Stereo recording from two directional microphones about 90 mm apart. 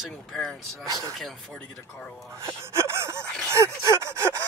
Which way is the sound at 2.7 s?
30° right (ahead or behind).